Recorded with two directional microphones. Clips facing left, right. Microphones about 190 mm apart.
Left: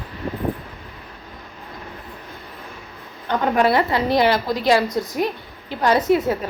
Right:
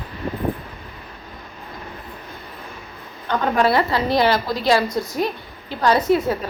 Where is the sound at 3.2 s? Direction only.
20° left (ahead or behind).